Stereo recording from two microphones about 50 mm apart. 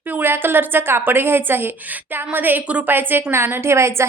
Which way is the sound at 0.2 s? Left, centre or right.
Right.